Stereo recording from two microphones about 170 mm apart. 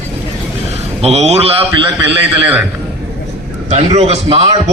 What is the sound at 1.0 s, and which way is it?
Speech, 40° right (ahead or behind).